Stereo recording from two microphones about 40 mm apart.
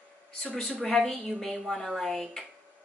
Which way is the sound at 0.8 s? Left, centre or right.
Centre.